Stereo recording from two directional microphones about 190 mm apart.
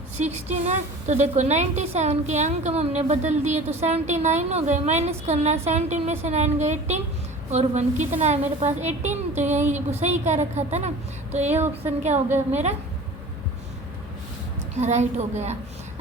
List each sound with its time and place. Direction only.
0.2 s a woman's voice: 35° right (ahead or behind)
11.4 s speech: 10° right (ahead or behind)
14.8 s a woman's voice: 35° right (ahead or behind)